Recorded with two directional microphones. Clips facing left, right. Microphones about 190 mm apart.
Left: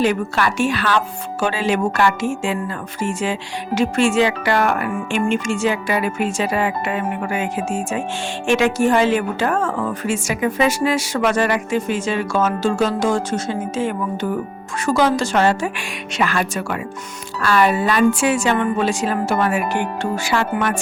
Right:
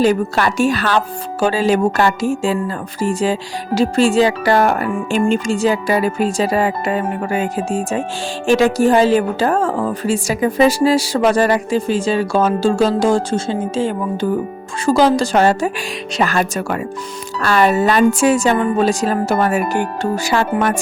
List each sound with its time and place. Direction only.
0.0 s a woman's voice: 40° right (ahead or behind)